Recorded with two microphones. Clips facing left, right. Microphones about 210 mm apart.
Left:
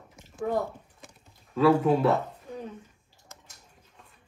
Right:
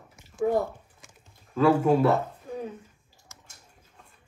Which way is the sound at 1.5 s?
Centre (ahead or behind).